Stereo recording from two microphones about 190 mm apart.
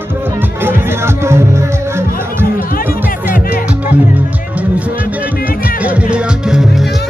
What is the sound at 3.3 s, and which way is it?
Music, 45° left (ahead or behind).